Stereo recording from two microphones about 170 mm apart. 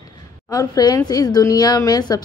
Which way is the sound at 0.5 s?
20° left (ahead or behind).